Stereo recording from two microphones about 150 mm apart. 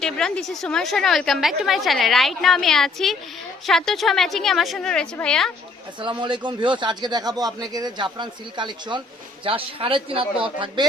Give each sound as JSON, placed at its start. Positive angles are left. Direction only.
{"t": 0.0, "sound": "a woman's voice", "side_deg": 5}
{"t": 6.0, "sound": "a man's voice", "side_deg": -30}